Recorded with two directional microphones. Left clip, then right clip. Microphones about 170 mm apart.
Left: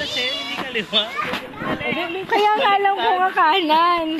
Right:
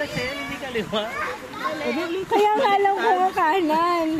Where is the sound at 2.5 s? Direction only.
10° right (ahead or behind).